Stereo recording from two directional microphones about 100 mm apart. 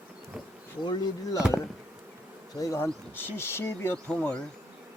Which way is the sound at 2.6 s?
30° left (ahead or behind).